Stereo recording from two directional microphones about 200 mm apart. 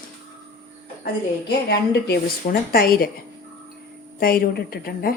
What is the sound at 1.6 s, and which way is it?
Speech, 55° left (ahead or behind).